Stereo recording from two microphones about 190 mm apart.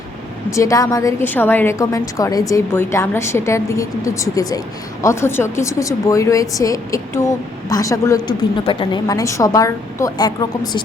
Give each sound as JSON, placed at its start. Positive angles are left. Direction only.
{"t": 0.5, "sound": "a woman's voice", "side_deg": 15}